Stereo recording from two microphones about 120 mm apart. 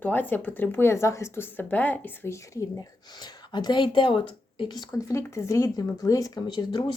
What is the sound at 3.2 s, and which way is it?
Speech, 35° left (ahead or behind).